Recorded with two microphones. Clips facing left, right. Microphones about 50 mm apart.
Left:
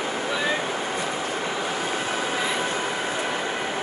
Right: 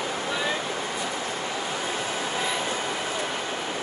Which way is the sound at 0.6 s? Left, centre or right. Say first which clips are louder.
Left 3 dB; left.